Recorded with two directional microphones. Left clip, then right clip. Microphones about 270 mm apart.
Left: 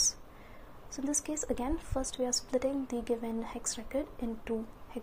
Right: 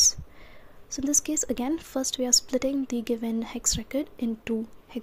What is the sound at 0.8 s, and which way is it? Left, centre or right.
A woman's voice, right.